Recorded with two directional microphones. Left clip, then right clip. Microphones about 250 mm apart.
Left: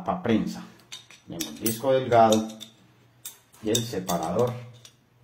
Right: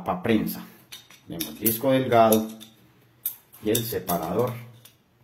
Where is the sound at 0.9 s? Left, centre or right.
Centre.